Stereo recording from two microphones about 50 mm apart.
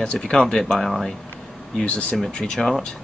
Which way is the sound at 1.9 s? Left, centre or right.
Left.